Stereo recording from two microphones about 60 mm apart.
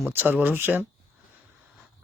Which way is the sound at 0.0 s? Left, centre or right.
Right.